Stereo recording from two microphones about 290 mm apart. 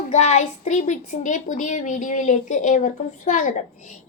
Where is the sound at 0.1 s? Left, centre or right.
Left.